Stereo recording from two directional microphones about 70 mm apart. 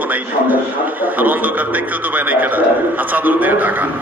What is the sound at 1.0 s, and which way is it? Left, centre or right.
A man's voice, right.